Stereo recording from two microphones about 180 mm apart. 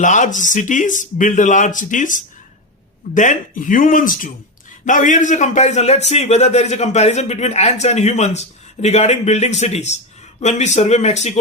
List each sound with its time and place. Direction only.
0.0 s a man's voice: 45° left (ahead or behind)